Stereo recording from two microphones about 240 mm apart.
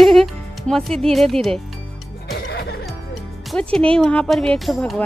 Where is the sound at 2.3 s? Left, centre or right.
Left.